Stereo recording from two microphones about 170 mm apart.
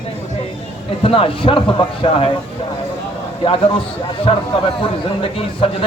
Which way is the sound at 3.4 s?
30° left (ahead or behind).